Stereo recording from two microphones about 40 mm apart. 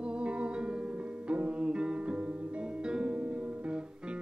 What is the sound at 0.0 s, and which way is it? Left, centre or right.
Music, right.